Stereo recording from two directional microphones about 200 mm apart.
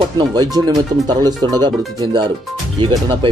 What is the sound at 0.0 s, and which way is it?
Speech, 20° right (ahead or behind).